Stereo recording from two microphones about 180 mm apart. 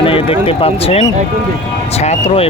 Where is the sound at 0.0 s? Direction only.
30° left (ahead or behind).